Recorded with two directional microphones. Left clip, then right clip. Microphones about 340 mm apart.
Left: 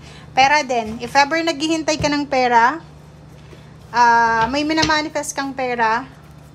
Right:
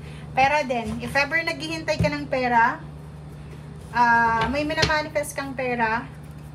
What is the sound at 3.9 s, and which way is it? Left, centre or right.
A woman's voice, centre.